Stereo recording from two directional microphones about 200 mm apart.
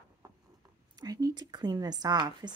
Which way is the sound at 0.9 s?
20° right (ahead or behind).